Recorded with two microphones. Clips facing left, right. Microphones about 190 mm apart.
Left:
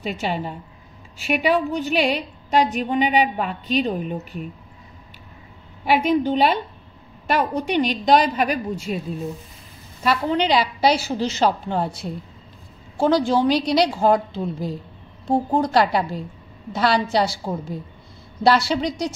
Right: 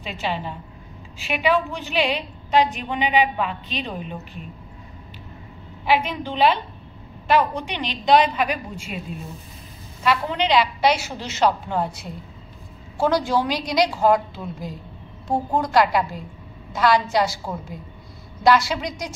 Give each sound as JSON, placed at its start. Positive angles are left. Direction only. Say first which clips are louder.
{"t": 0.0, "sound": "a woman's voice", "louder": "left 2 dB", "side_deg": 45}
{"t": 5.9, "sound": "a woman's voice", "louder": "left 4 dB", "side_deg": 45}
{"t": 10.0, "sound": "a woman's voice", "louder": "left 2 dB", "side_deg": 35}